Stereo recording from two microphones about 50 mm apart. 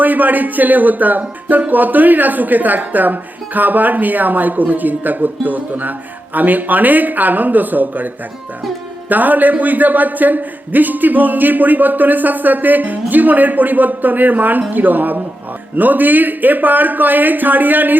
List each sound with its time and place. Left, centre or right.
0.0 s speech: right